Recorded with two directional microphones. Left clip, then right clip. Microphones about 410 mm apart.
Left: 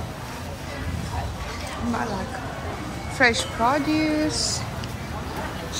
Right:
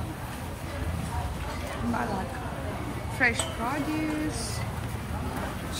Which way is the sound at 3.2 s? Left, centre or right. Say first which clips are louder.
Left 6 dB; centre.